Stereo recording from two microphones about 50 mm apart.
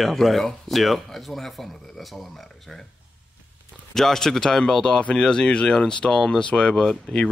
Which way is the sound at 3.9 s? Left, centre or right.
Centre.